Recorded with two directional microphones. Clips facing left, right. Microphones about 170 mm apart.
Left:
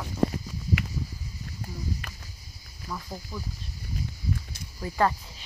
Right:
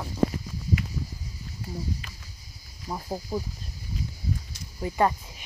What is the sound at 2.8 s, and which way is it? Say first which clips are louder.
Speech: right 4 dB; 35° right (ahead or behind).